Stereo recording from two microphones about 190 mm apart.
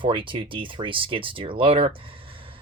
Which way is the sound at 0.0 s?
25° right (ahead or behind).